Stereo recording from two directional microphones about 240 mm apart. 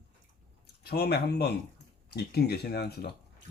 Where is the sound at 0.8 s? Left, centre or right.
Left.